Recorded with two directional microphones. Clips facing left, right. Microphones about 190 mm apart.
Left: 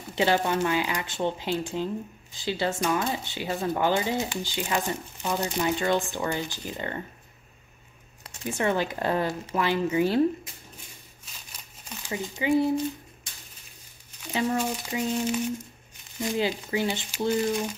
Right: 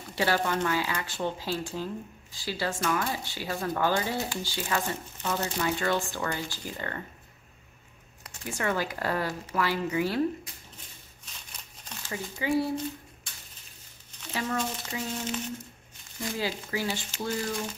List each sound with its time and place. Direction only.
0.1 s speech: 20° left (ahead or behind)
8.2 s speech: 25° left (ahead or behind)
12.1 s speech: 20° left (ahead or behind)
14.1 s a sound: 10° left (ahead or behind)
14.6 s speech: 10° left (ahead or behind)